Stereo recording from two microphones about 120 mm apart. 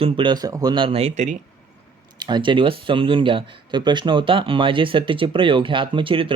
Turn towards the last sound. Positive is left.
turn(degrees=-45)  # may be behind; listen again after turning